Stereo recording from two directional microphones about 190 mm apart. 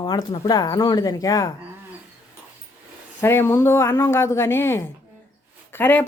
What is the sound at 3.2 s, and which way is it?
Speech, 10° left (ahead or behind).